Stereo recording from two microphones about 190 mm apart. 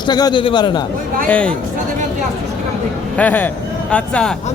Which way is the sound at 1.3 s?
5° left (ahead or behind).